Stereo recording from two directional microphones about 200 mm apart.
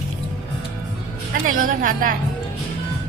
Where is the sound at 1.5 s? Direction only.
45° right (ahead or behind).